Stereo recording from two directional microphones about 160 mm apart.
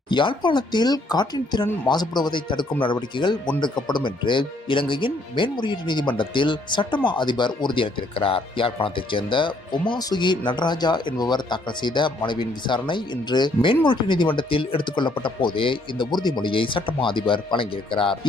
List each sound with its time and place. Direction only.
0.1 s speech: 30° left (ahead or behind)